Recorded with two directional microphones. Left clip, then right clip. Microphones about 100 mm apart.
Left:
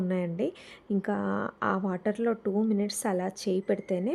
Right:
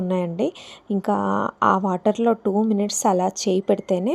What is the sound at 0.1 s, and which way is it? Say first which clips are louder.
A woman's voice: right 10 dB; 25° right (ahead or behind).